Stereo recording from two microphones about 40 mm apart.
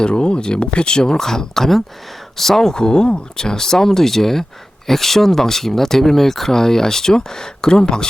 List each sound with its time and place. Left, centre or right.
0.0 s speech: left